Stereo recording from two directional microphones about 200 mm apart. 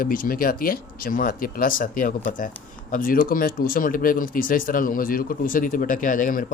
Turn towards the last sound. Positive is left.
turn(degrees=45)  # may be behind; listen again after turning